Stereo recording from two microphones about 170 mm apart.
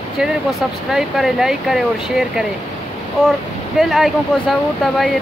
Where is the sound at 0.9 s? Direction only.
Centre (ahead or behind).